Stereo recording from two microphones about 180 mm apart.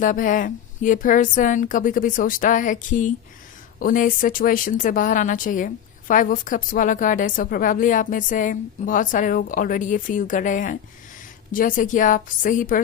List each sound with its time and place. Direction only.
0.0 s speech: 45° left (ahead or behind)